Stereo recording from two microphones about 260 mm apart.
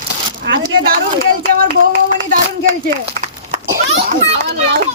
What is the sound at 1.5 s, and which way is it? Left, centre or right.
Speech, right.